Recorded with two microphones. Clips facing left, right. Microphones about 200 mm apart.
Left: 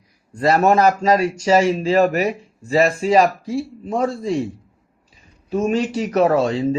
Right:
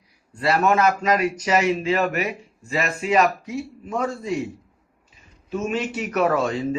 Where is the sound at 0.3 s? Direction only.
40° left (ahead or behind).